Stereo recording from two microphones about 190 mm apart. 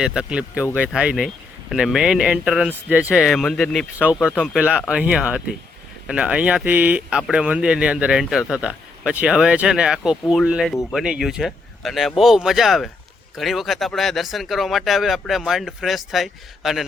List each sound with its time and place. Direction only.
0.0 s speech: 5° right (ahead or behind)